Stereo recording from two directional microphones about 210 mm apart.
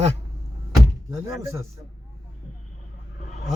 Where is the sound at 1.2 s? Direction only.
15° right (ahead or behind).